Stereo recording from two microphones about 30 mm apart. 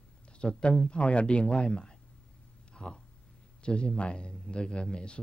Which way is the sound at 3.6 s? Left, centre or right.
Left.